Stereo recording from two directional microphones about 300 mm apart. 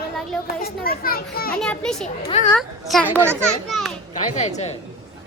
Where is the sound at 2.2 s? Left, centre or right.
Centre.